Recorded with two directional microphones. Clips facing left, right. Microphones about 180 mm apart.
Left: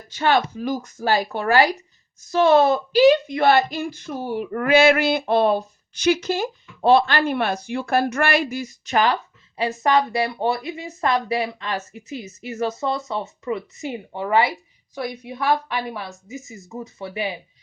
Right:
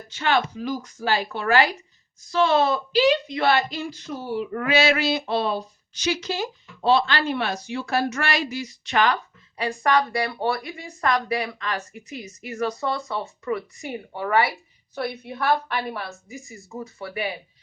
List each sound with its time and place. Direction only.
0.2 s speech: 45° left (ahead or behind)
9.6 s speech: 20° left (ahead or behind)